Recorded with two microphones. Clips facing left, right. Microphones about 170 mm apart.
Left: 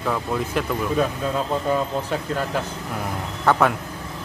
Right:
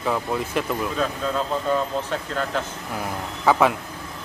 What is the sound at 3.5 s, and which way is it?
Speech, 5° right (ahead or behind).